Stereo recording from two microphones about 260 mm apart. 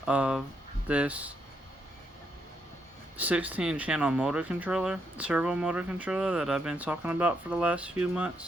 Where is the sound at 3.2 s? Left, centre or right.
Centre.